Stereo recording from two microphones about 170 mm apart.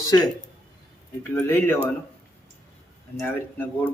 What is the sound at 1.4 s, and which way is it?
Speech, 15° left (ahead or behind).